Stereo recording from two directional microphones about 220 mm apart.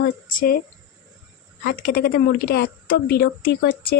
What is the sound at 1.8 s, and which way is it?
Speech, 45° left (ahead or behind).